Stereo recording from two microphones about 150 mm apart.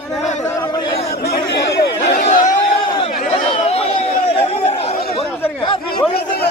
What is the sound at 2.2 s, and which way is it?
Chatter, 55° left (ahead or behind).